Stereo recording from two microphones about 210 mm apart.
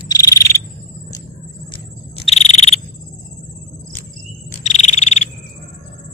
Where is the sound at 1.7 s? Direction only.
30° left (ahead or behind).